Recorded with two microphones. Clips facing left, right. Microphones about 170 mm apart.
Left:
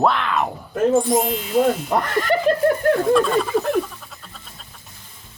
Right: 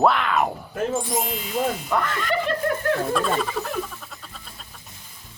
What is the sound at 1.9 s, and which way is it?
Speech, 40° left (ahead or behind).